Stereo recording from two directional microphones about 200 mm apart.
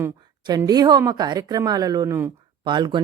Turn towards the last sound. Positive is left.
turn(degrees=-20)  # may be behind; listen again after turning